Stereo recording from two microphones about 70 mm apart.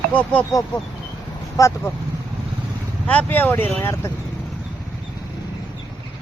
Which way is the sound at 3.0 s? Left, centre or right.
Centre.